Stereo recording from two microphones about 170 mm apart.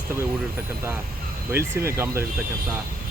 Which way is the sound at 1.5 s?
15° right (ahead or behind).